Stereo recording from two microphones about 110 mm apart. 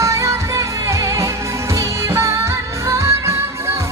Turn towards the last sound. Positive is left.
turn(degrees=-25)  # may be behind; listen again after turning